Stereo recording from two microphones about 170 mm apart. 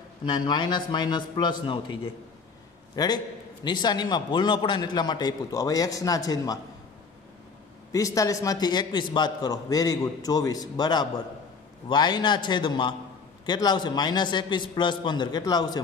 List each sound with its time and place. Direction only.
0.2 s a man's voice: 25° left (ahead or behind)
3.0 s a man's voice: 20° left (ahead or behind)
7.9 s a man's voice: 20° left (ahead or behind)